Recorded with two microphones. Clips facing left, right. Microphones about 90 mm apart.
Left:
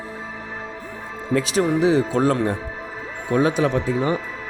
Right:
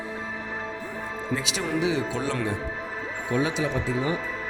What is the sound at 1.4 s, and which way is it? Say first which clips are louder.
A man's voice: left 9 dB; 40° left (ahead or behind).